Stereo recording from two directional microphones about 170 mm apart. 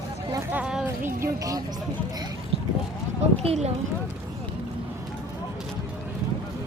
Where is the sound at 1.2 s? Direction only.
20° right (ahead or behind).